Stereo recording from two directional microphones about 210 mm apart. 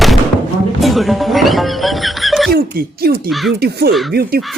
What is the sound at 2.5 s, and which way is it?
Speech, 45° right (ahead or behind).